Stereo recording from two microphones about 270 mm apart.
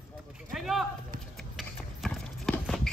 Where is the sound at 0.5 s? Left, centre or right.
Centre.